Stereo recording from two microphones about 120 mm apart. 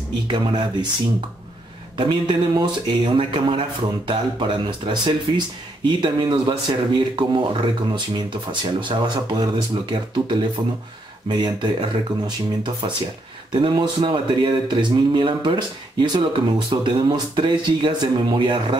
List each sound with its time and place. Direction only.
0.3 s speech: 40° right (ahead or behind)
2.0 s speech: 40° right (ahead or behind)